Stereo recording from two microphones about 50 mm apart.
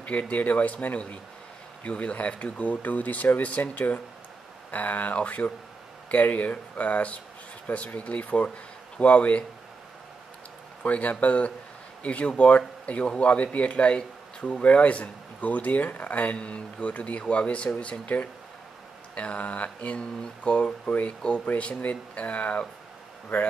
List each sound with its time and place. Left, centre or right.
0.0 s speech: left
10.8 s speech: left